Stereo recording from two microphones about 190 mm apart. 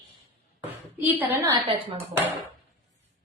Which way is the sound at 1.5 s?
25° right (ahead or behind).